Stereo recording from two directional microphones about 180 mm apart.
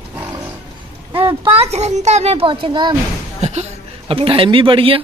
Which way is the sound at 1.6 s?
35° right (ahead or behind).